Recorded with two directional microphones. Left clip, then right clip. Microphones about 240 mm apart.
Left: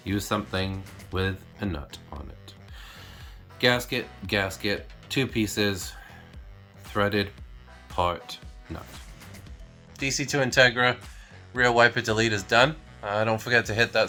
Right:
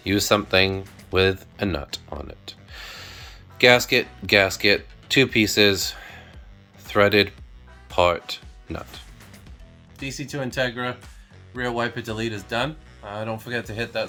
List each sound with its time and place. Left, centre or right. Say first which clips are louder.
0.3 s speech: right 12 dB; right
3.6 s speech: right 8 dB; right
5.3 s speech: right 8 dB; centre
5.9 s music: right 8 dB; right
6.9 s speech: right 8 dB; right
10.0 s speech: left 5 dB; centre